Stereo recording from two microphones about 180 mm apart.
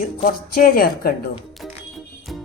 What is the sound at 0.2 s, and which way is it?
Speech, 50° left (ahead or behind).